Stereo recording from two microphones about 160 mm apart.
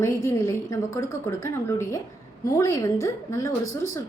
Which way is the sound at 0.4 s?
20° left (ahead or behind).